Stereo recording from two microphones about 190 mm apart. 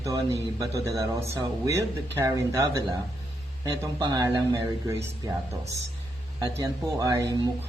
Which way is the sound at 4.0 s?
20° right (ahead or behind).